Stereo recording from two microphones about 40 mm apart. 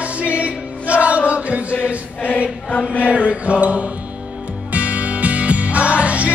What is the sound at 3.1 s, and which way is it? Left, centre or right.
Mantra, right.